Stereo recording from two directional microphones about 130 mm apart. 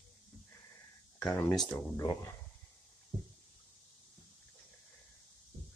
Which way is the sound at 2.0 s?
25° left (ahead or behind).